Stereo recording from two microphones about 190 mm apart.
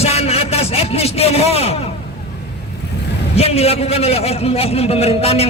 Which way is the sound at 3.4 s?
30° left (ahead or behind).